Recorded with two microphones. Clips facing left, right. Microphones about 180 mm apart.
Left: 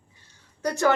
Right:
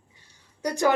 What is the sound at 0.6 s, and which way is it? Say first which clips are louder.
Speech: left 1 dB; 15° right (ahead or behind).